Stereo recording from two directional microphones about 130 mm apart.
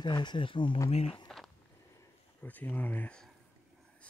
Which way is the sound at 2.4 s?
15° left (ahead or behind).